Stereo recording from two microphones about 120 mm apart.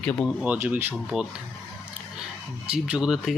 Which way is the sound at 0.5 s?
20° right (ahead or behind).